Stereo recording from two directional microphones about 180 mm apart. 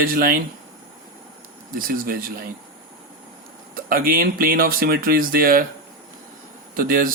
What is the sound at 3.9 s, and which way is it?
Speech, 55° right (ahead or behind).